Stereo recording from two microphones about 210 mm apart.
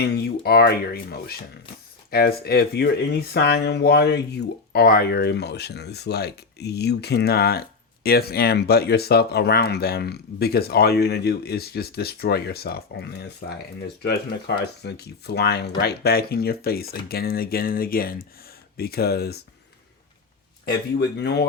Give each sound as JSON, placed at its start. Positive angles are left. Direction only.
{"t": 0.0, "sound": "speech", "side_deg": 50}
{"t": 21.0, "sound": "speech", "side_deg": 55}